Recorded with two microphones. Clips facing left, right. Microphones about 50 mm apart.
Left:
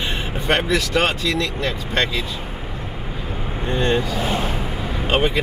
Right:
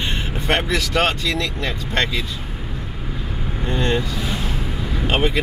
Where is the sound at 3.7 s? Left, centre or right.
Centre.